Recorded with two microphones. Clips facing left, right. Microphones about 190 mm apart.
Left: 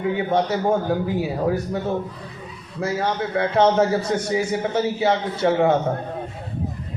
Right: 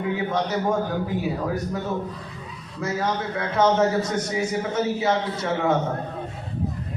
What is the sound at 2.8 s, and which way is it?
A man's voice, 30° left (ahead or behind).